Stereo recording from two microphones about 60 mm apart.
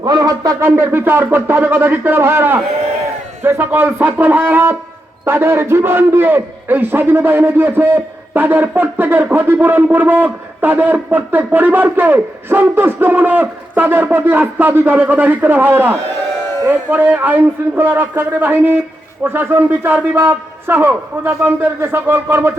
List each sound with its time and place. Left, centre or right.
0.0 s speech: right
0.6 s a man's voice: right